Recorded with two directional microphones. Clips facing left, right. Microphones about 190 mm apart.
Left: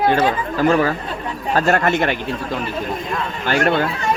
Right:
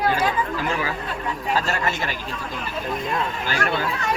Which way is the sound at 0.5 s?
60° left (ahead or behind).